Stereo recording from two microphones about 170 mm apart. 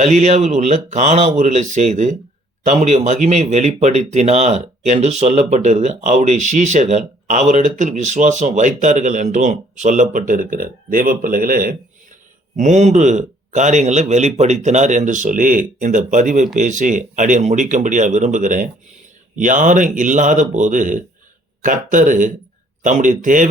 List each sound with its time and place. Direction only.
0.0 s speech: 45° right (ahead or behind)
12.5 s speech: 45° right (ahead or behind)